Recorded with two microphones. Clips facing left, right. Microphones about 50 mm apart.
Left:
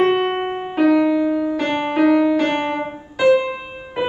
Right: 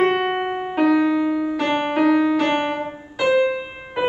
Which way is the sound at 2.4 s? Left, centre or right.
Centre.